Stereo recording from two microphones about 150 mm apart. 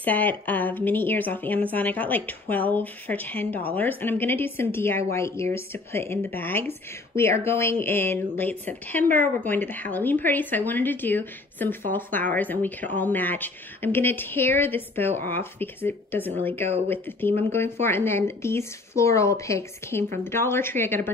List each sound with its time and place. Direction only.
0.0 s speech: 10° left (ahead or behind)